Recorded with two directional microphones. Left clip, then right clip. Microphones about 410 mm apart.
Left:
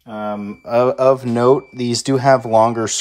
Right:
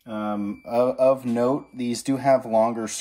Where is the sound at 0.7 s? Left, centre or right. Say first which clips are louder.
Left 6 dB; centre.